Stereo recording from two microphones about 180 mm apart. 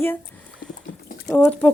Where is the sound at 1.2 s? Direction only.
5° left (ahead or behind).